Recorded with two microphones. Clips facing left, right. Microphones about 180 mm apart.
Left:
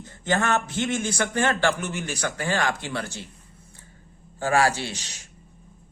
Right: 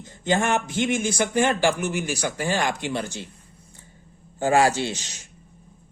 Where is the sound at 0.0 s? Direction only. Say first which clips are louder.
Right 2 dB; 15° right (ahead or behind).